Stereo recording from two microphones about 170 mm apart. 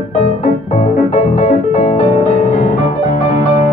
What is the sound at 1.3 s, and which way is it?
Music, 45° left (ahead or behind).